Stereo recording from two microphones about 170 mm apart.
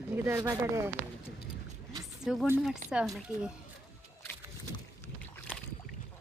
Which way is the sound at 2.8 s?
5° right (ahead or behind).